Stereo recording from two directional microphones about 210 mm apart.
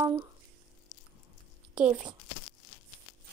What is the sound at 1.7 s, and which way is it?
Speech, 5° right (ahead or behind).